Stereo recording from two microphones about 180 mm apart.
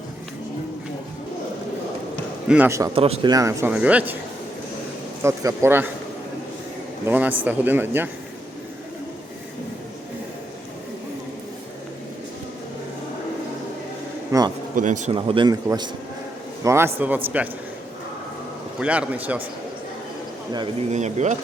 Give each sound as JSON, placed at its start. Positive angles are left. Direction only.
{"t": 2.5, "sound": "speech", "side_deg": -10}
{"t": 2.9, "sound": "a man's voice", "side_deg": -30}
{"t": 3.3, "sound": "speech", "side_deg": -15}
{"t": 3.7, "sound": "speech", "side_deg": -5}
{"t": 5.2, "sound": "speech", "side_deg": -15}
{"t": 7.0, "sound": "speech", "side_deg": -10}
{"t": 14.3, "sound": "a sound", "side_deg": -20}
{"t": 14.8, "sound": "speech", "side_deg": -45}
{"t": 15.1, "sound": "a man's voice", "side_deg": -30}
{"t": 18.8, "sound": "speech", "side_deg": -5}
{"t": 20.9, "sound": "a man's voice", "side_deg": -40}